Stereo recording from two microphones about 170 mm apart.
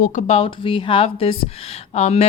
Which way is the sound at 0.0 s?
45° left (ahead or behind).